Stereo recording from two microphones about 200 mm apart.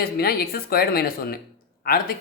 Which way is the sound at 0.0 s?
50° left (ahead or behind).